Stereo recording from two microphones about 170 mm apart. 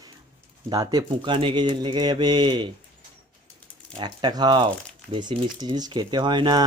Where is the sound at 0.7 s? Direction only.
25° right (ahead or behind).